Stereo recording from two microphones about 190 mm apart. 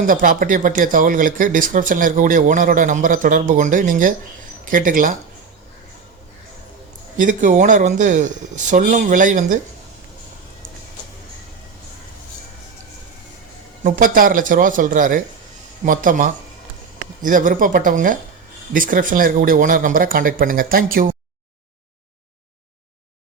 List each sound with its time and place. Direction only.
0.1 s speech: 45° right (ahead or behind)
7.2 s speech: 45° right (ahead or behind)
13.8 s speech: 45° right (ahead or behind)